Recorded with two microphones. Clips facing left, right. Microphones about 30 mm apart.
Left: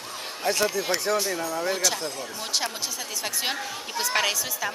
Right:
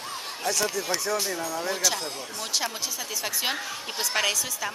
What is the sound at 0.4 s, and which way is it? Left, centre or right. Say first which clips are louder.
Speech: left 3 dB; left.